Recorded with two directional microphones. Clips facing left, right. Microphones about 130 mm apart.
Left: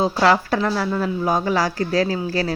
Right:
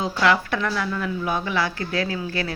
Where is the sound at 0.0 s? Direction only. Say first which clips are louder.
Left 4 dB; 35° left (ahead or behind).